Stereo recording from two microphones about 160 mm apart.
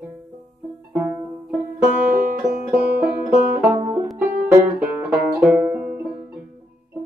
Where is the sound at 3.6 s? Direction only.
20° right (ahead or behind).